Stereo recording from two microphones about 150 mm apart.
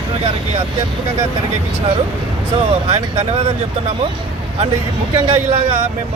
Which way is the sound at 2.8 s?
45° right (ahead or behind).